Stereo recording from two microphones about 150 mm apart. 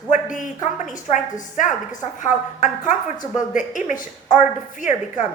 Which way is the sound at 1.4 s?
55° left (ahead or behind).